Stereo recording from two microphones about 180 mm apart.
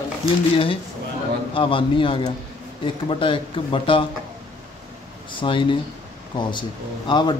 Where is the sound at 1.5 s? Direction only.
30° left (ahead or behind).